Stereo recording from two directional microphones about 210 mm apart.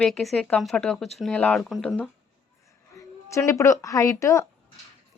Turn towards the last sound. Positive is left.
turn(degrees=15)  # may be behind; listen again after turning